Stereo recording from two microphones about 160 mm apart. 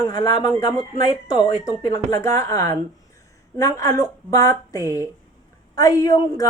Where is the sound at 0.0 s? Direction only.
25° left (ahead or behind).